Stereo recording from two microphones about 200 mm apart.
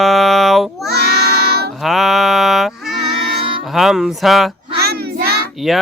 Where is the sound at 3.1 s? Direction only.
25° right (ahead or behind).